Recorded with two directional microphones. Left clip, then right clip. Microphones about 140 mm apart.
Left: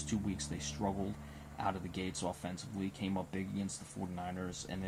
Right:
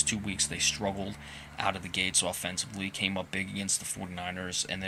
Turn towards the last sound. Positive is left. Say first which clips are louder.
# right 9 dB
turn(degrees=-10)  # may be behind; listen again after turning